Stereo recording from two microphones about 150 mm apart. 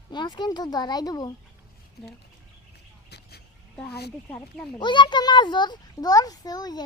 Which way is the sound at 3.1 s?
90° left.